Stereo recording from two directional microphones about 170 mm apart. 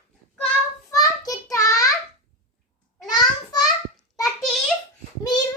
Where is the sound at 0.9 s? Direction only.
20° left (ahead or behind).